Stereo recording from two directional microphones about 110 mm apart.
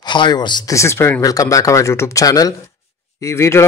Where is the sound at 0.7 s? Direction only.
25° left (ahead or behind).